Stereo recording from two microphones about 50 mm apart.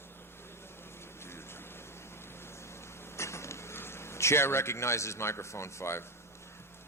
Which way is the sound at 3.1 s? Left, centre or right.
Left.